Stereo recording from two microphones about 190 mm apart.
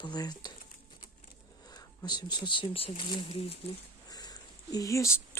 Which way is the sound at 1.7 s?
20° left (ahead or behind).